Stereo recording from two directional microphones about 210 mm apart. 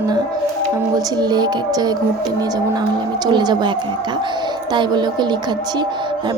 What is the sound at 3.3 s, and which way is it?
Speech, 20° right (ahead or behind).